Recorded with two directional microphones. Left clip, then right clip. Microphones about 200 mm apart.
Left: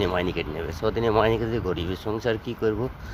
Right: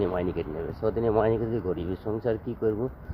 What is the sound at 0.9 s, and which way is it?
Speech, centre (ahead or behind).